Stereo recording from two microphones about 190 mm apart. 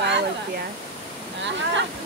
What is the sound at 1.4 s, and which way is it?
Speech, 70° right (ahead or behind).